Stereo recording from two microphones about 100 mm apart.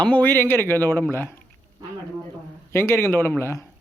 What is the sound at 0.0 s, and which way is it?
Speech, 15° left (ahead or behind).